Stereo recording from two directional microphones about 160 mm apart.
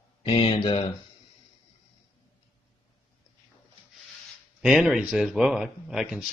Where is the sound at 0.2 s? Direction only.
35° left (ahead or behind).